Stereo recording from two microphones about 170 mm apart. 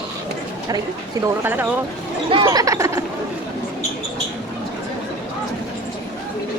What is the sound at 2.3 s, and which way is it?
Speech, 25° right (ahead or behind).